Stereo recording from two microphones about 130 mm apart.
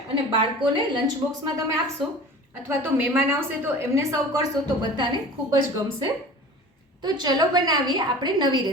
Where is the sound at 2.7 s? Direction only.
15° right (ahead or behind).